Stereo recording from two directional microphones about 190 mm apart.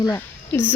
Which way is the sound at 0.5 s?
10° left (ahead or behind).